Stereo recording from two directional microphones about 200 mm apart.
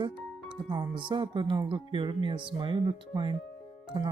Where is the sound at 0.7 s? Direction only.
25° right (ahead or behind).